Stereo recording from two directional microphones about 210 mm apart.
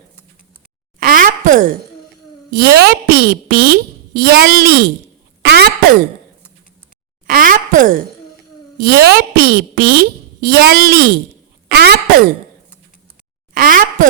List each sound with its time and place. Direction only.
0.9 s a sound: 40° right (ahead or behind)
2.5 s a woman's voice: 50° right (ahead or behind)
5.4 s cough: 50° right (ahead or behind)
7.3 s a woman's voice: 40° right (ahead or behind)
11.7 s cough: 50° right (ahead or behind)
13.5 s a sound: 40° right (ahead or behind)